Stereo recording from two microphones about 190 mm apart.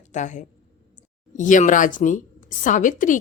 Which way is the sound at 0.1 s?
40° left (ahead or behind).